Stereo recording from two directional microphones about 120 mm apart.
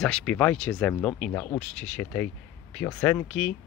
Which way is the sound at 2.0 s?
15° left (ahead or behind).